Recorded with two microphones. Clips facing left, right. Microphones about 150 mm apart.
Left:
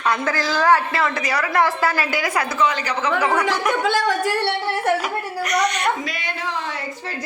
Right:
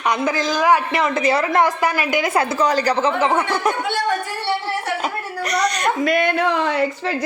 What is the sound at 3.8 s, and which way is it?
Speech, 85° left.